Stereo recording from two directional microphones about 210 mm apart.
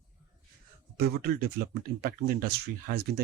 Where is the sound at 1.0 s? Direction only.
45° right (ahead or behind).